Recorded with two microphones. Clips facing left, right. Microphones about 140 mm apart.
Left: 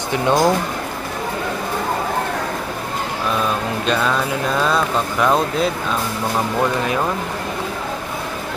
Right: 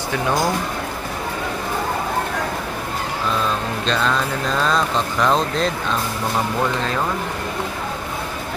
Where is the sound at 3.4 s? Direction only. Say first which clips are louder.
Left 2 dB; 10° left (ahead or behind).